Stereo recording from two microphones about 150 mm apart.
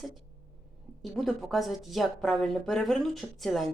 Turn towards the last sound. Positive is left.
turn(degrees=0)  # may be behind; listen again after turning